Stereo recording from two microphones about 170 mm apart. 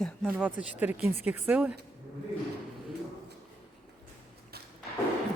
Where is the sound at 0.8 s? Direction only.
10° right (ahead or behind).